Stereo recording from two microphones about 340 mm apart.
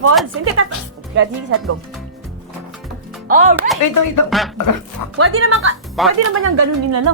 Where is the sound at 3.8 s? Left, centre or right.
Left.